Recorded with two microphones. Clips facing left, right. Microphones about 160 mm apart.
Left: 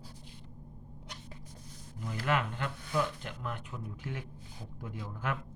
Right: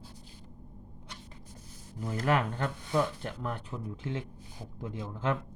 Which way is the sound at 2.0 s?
40° right (ahead or behind).